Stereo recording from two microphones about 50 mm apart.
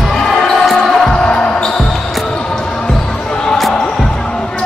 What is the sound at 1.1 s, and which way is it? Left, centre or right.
Basketball bounce, left.